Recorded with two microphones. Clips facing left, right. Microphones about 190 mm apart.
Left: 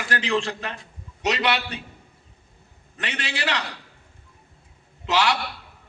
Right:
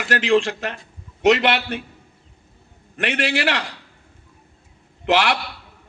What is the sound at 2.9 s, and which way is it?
Speech, 60° right (ahead or behind).